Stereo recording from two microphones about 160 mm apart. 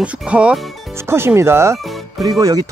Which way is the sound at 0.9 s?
15° right (ahead or behind).